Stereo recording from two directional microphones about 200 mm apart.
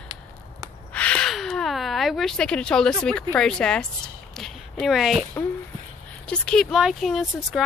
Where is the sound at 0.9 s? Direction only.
5° left (ahead or behind).